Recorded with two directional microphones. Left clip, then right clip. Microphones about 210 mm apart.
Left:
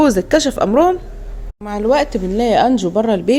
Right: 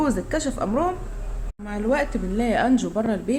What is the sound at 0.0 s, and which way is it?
A woman's voice, 40° left (ahead or behind).